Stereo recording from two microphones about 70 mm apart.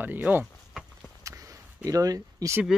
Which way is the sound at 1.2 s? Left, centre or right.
Right.